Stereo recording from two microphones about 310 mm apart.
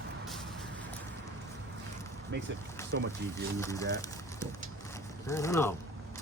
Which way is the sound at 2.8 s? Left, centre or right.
Centre.